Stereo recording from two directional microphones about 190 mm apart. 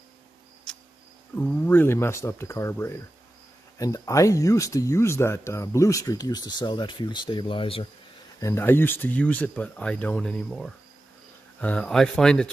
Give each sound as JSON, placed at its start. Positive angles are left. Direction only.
{"t": 0.7, "sound": "cricket", "side_deg": 5}
{"t": 1.4, "sound": "speech", "side_deg": 5}
{"t": 8.4, "sound": "speech", "side_deg": 15}